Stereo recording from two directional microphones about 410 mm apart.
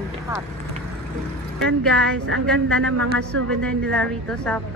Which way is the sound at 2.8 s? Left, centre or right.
Right.